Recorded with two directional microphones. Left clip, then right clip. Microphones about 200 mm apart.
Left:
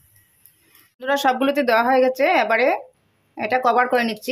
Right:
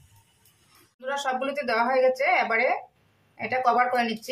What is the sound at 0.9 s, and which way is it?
A woman's voice, 40° left (ahead or behind).